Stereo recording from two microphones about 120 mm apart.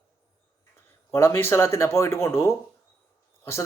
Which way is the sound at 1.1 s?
20° left (ahead or behind).